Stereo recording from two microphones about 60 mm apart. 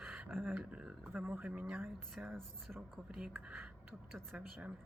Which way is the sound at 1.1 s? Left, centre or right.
Right.